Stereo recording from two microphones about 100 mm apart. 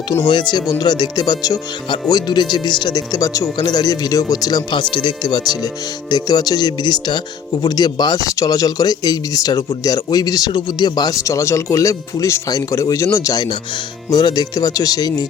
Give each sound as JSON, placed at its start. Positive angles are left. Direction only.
{"t": 0.2, "sound": "speech", "side_deg": 50}
{"t": 3.1, "sound": "speech", "side_deg": 35}
{"t": 10.5, "sound": "speech", "side_deg": 50}
{"t": 13.3, "sound": "speech", "side_deg": 45}